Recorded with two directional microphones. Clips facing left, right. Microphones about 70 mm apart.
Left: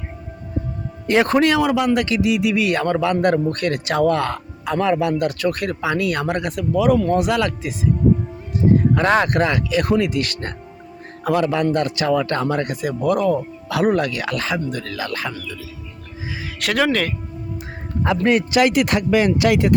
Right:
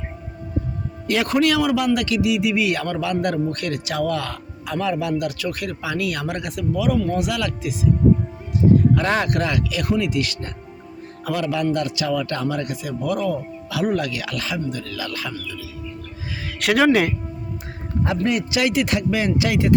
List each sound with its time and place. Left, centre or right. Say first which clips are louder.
1.0 s a man's voice: left 3 dB; left
9.0 s a man's voice: left 4 dB; left
16.6 s speech: right 3 dB; centre
18.3 s speech: left 7 dB; left